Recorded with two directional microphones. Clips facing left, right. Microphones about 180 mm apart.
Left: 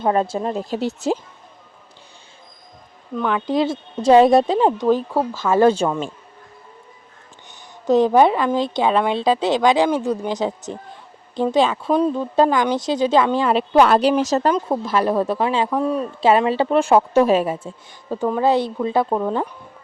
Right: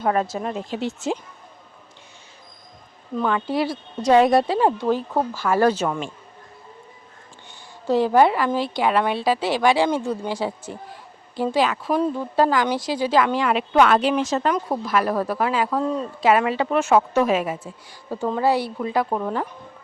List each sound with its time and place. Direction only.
0.0 s a woman's voice: 30° left (ahead or behind)
3.3 s speech: 15° left (ahead or behind)
7.9 s a woman's voice: 20° left (ahead or behind); by 14.5 s 40° left (ahead or behind)
14.5 s speech: 25° left (ahead or behind)
16.2 s a woman's voice: 30° left (ahead or behind)
18.1 s speech: 15° left (ahead or behind)